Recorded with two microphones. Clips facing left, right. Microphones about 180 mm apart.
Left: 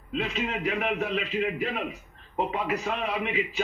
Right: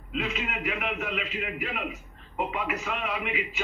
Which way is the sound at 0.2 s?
35° left (ahead or behind).